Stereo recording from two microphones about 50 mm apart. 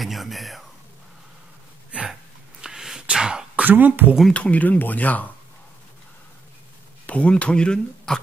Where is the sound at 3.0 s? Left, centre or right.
Centre.